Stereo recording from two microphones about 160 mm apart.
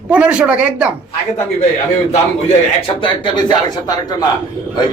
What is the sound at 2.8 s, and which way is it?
Speech, 30° left (ahead or behind).